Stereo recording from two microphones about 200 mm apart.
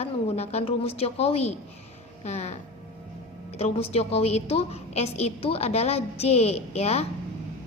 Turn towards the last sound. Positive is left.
turn(degrees=35)  # may be behind; listen again after turning